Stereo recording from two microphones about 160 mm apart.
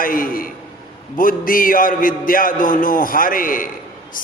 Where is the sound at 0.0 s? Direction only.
60° left (ahead or behind).